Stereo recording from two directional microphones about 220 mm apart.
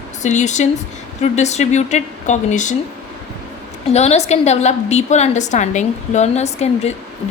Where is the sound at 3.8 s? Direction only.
30° left (ahead or behind).